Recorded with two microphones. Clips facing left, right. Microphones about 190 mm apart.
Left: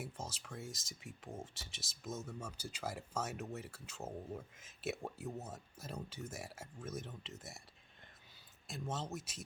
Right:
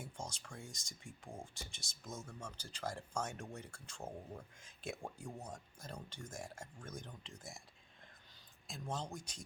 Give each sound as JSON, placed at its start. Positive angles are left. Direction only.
{"t": 0.0, "sound": "speech", "side_deg": 5}
{"t": 8.6, "sound": "speech", "side_deg": 0}